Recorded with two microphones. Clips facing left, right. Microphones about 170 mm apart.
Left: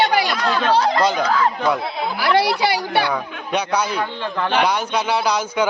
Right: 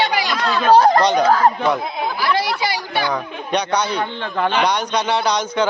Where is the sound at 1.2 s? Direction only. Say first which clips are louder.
Right 4 dB; 45° right (ahead or behind).